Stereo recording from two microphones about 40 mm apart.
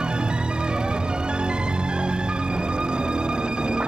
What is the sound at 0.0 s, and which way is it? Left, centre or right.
Music, right.